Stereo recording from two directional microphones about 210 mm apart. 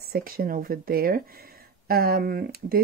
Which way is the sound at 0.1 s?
45° right (ahead or behind).